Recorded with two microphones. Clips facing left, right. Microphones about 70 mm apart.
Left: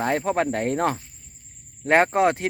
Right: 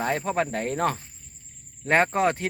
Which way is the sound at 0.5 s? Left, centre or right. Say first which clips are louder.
Left 3 dB; left.